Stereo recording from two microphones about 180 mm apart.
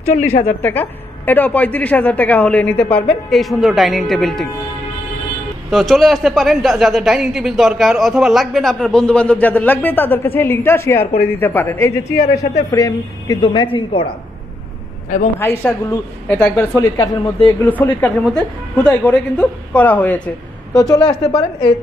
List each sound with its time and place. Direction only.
0.1 s a woman's voice: 35° left (ahead or behind)
0.6 s a woman's voice: 10° left (ahead or behind)
5.7 s a man's voice: centre (ahead or behind); by 14.0 s 30° left (ahead or behind)
15.3 s a woman's voice: 10° left (ahead or behind)
17.6 s a woman's voice: 10° left (ahead or behind)
20.7 s a woman's voice: 20° left (ahead or behind)